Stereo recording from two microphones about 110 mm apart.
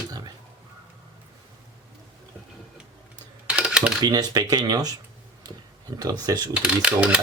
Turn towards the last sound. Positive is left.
turn(degrees=-10)  # may be behind; listen again after turning